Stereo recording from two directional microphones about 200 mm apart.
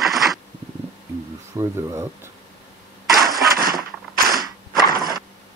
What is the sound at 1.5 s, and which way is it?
Speech, 15° right (ahead or behind).